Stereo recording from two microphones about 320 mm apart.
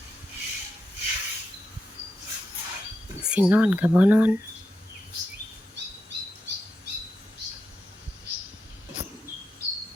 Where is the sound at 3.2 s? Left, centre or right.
Centre.